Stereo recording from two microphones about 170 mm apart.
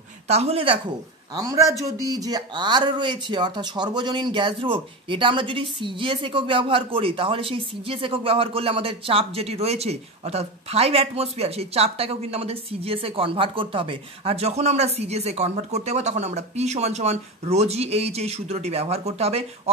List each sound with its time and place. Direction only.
0.3 s speech: 40° right (ahead or behind)
1.3 s a man's voice: 20° right (ahead or behind); by 19.7 s 35° right (ahead or behind)